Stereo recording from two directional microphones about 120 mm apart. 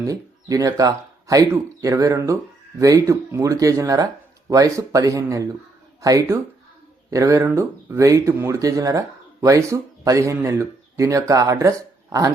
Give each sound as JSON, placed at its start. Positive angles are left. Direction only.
{"t": 0.0, "sound": "speech", "side_deg": -30}